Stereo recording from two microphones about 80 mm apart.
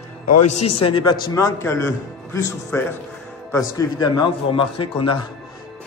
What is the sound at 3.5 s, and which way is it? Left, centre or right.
Speech, left.